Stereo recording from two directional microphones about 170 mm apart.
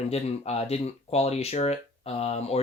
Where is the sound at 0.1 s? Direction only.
35° left (ahead or behind).